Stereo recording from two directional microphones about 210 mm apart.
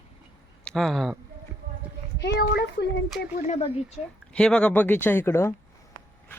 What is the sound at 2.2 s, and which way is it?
Speech, 50° left (ahead or behind).